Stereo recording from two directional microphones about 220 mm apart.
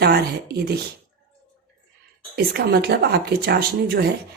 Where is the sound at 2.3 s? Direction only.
45° right (ahead or behind).